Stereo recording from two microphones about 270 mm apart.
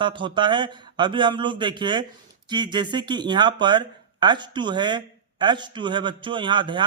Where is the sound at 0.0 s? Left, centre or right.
Centre.